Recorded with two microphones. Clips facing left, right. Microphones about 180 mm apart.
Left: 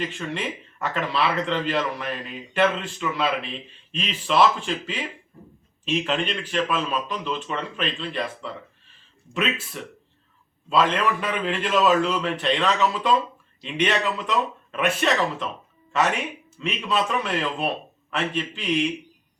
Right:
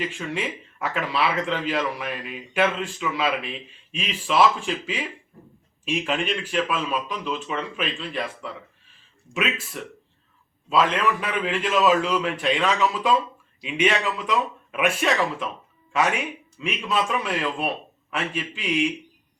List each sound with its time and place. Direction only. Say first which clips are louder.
0.0 s speech: even; 5° right (ahead or behind)
16.6 s speech: even; 5° right (ahead or behind)